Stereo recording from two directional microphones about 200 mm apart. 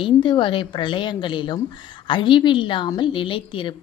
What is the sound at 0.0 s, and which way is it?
A woman's voice, 25° left (ahead or behind).